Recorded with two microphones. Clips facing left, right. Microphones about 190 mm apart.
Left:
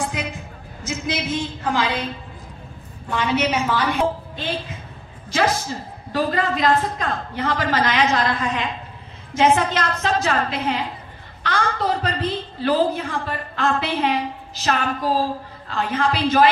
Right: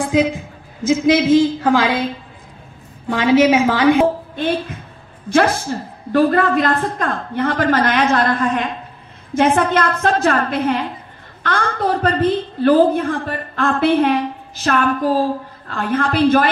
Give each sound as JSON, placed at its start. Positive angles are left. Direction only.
{"t": 0.0, "sound": "a woman's voice", "side_deg": -90}
{"t": 3.1, "sound": "a woman's voice", "side_deg": -90}
{"t": 4.0, "sound": "a woman's voice", "side_deg": -55}